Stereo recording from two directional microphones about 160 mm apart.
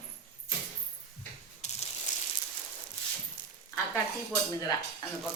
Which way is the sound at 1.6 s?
45° left (ahead or behind).